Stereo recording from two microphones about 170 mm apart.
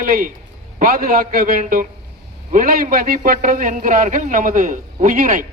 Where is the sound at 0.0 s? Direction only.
55° right (ahead or behind).